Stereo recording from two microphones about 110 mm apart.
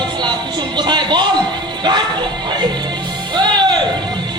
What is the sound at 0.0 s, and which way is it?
Music, 45° right (ahead or behind).